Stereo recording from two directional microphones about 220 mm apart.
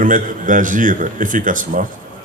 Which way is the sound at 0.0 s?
35° right (ahead or behind).